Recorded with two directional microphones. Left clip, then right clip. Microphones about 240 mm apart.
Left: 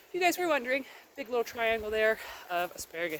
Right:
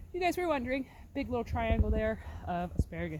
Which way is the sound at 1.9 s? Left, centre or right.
Centre.